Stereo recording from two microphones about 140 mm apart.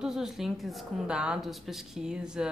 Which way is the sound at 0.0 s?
5° right (ahead or behind).